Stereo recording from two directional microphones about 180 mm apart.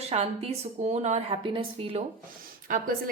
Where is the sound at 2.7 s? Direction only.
50° right (ahead or behind).